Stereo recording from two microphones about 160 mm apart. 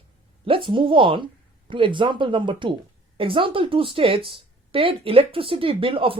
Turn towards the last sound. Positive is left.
turn(degrees=-35)  # may be behind; listen again after turning